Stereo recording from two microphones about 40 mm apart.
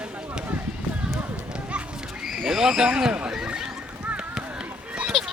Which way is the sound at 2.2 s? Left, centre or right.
Centre.